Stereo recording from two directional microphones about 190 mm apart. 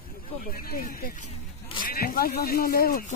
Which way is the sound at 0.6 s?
50° left (ahead or behind).